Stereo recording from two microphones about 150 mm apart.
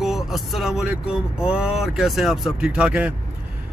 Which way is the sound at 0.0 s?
Centre (ahead or behind).